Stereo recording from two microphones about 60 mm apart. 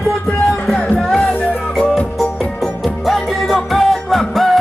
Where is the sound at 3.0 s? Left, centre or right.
Centre.